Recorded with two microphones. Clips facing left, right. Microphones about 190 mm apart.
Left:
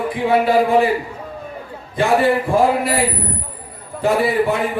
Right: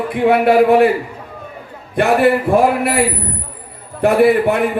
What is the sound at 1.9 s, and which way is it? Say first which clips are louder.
A man's voice: right 3 dB; 65° right (ahead or behind).